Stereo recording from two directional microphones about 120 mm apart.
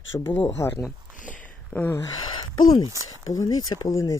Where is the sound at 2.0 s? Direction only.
35° left (ahead or behind).